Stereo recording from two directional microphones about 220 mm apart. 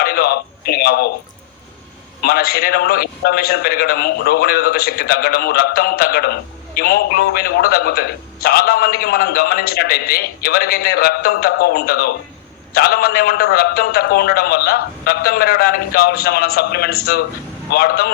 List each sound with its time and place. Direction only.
0.0 s a man's voice: 45° left (ahead or behind)
2.2 s a man's voice: 45° left (ahead or behind)